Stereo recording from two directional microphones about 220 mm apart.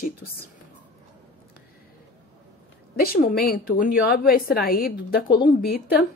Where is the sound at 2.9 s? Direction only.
45° left (ahead or behind).